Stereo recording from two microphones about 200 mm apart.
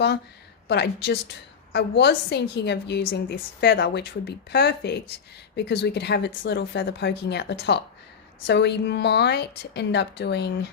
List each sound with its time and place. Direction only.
0.7 s a woman's voice: 60° left (ahead or behind)